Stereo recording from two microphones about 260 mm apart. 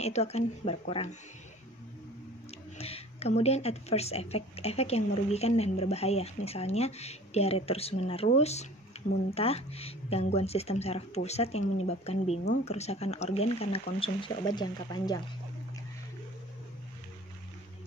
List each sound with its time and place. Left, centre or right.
0.0 s speech: left
2.8 s speech: left